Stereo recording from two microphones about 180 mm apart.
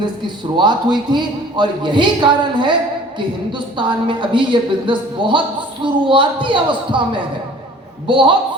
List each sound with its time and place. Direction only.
0.5 s a man's voice: 25° right (ahead or behind)
8.0 s a man's voice: 30° right (ahead or behind)